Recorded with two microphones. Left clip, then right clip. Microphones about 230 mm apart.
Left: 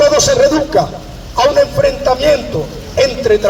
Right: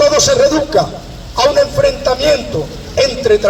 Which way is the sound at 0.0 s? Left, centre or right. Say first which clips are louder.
Even; right.